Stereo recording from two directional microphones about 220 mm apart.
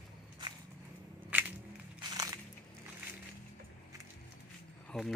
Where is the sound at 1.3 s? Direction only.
5° right (ahead or behind).